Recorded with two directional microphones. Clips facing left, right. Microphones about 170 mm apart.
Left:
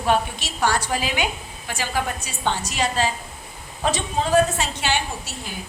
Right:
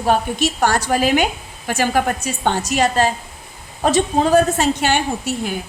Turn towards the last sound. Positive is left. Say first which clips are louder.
# right 11 dB
turn(degrees=-55)  # may be behind; listen again after turning